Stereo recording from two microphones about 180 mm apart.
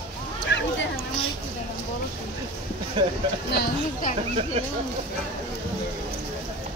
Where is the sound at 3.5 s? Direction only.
50° left (ahead or behind).